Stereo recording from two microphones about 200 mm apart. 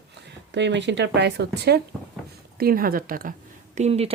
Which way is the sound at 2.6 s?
45° right (ahead or behind).